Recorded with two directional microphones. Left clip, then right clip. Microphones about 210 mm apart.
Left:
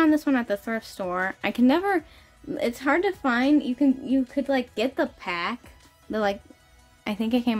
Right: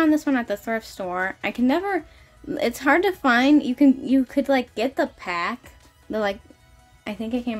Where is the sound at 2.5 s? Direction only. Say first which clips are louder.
Right 4 dB; 10° right (ahead or behind).